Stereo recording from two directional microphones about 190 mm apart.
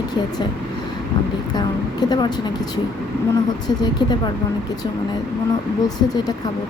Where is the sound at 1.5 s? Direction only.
20° left (ahead or behind).